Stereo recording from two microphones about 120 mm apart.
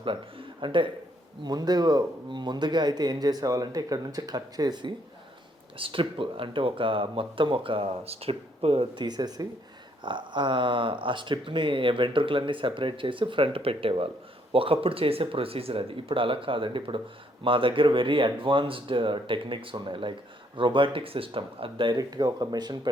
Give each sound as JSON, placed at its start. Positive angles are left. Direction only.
{"t": 0.0, "sound": "speech", "side_deg": -45}
{"t": 1.5, "sound": "speech", "side_deg": -35}